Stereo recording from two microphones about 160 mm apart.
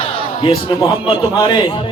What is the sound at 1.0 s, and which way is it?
Speech, 30° left (ahead or behind).